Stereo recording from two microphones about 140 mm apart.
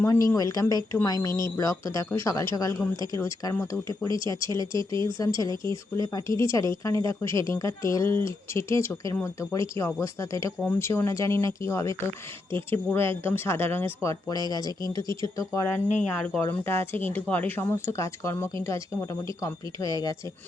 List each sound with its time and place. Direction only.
0.0 s speech: 20° left (ahead or behind)
4.9 s speech: 35° right (ahead or behind)
5.1 s speech: 25° left (ahead or behind)
14.7 s speech: 30° right (ahead or behind)
14.9 s speech: 25° left (ahead or behind)
16.0 s speech: 10° left (ahead or behind)
16.4 s speech: 20° left (ahead or behind)